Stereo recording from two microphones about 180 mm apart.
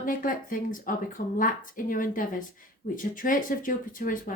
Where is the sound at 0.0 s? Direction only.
50° left (ahead or behind).